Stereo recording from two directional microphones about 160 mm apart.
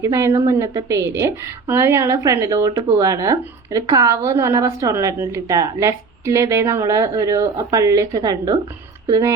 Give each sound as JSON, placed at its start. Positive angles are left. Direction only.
{"t": 0.0, "sound": "a woman's voice", "side_deg": -20}